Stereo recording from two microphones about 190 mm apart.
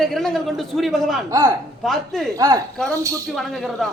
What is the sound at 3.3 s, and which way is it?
Speech, centre (ahead or behind).